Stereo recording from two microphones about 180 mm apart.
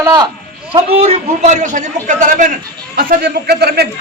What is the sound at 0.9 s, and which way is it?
A man's voice, 40° right (ahead or behind).